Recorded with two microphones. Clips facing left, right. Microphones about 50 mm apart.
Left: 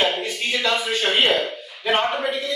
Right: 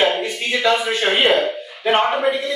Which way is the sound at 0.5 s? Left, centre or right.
Centre.